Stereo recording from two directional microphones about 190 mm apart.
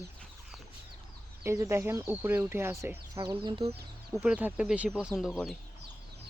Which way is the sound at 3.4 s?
30° right (ahead or behind).